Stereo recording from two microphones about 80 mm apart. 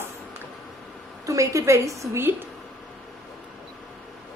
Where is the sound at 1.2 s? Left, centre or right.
Right.